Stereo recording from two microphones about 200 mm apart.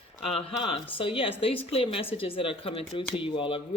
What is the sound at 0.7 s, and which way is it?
Speech, 25° left (ahead or behind).